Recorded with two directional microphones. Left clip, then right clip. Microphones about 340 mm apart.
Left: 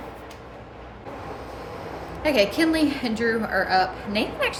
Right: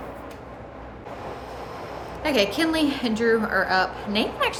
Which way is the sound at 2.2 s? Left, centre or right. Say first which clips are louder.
Left 2 dB; centre.